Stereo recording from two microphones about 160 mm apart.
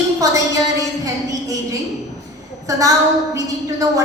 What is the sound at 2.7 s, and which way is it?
Speech, 20° right (ahead or behind).